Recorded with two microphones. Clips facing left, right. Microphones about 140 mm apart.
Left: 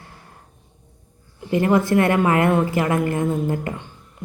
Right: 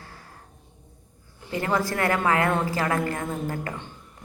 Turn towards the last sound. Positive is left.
turn(degrees=20)  # may be behind; listen again after turning